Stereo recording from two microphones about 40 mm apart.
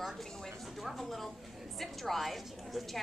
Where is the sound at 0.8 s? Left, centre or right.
Centre.